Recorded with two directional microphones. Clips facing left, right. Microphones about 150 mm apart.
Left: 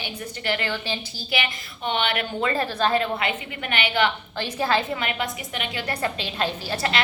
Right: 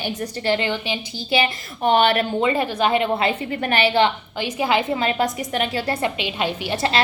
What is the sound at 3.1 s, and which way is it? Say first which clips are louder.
Speech: right 6 dB; 35° right (ahead or behind).